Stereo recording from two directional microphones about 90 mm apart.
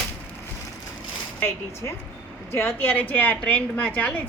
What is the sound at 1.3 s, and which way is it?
A woman's voice, 25° left (ahead or behind).